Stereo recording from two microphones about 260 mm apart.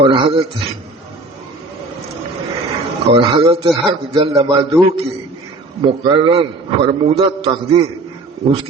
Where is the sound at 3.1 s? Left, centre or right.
Centre.